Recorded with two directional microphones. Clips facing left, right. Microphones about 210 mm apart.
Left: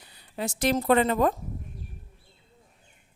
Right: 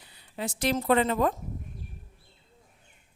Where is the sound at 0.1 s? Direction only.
45° left (ahead or behind).